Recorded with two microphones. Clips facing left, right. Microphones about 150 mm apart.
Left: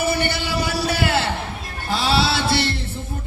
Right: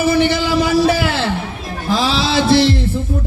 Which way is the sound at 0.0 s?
90° right.